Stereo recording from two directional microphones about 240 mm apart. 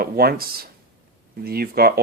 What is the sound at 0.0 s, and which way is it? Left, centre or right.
Speech, right.